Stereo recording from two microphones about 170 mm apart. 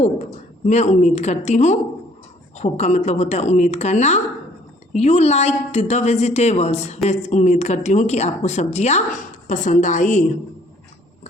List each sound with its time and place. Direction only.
0.7 s a woman's voice: 45° left (ahead or behind)